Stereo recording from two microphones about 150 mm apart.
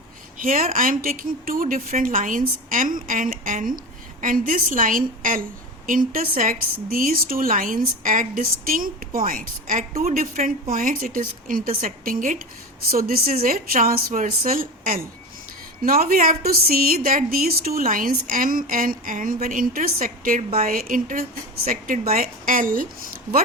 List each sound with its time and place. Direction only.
0.3 s a woman's voice: 65° right (ahead or behind)
13.0 s a woman's voice: 80° right